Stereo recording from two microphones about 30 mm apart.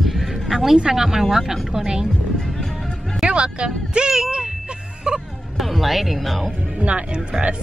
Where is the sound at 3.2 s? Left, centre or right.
Right.